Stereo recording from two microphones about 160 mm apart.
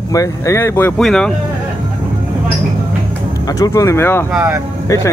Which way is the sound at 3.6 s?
20° left (ahead or behind).